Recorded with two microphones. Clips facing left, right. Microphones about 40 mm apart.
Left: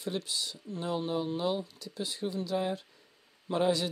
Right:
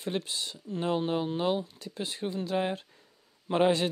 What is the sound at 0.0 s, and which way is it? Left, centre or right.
Speech, right.